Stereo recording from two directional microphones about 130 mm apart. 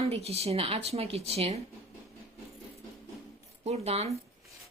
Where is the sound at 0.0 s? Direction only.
50° right (ahead or behind).